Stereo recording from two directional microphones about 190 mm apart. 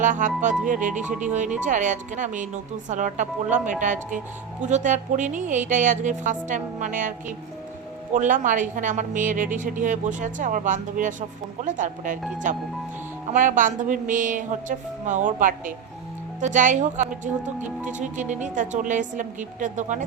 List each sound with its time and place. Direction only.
0.0 s a woman's voice: 45° right (ahead or behind)